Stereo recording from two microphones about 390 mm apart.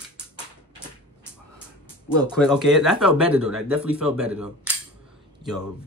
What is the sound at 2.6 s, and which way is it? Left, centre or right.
Speech, centre.